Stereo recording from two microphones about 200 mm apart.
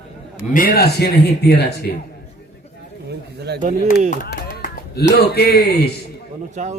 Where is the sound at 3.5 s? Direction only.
55° right (ahead or behind).